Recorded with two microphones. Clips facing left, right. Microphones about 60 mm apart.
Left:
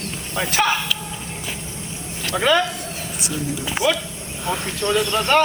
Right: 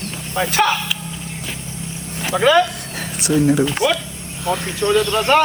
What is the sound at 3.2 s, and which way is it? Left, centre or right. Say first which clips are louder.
Speech: right 12 dB; right.